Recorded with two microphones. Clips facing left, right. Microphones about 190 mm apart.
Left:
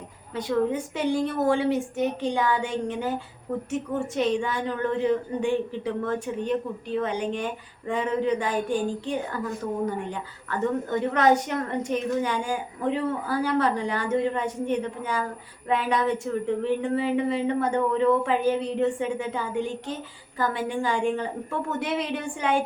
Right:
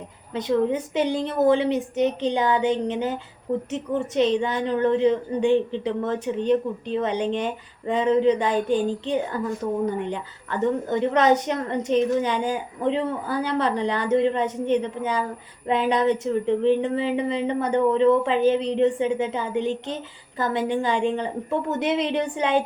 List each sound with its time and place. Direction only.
0.3 s a woman's voice: 20° right (ahead or behind)